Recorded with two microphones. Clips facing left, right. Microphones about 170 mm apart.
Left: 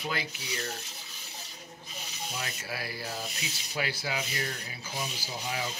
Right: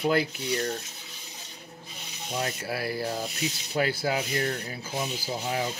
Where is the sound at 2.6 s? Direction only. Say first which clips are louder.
Right 8 dB; 55° right (ahead or behind).